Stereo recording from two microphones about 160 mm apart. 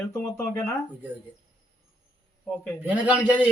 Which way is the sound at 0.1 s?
15° left (ahead or behind).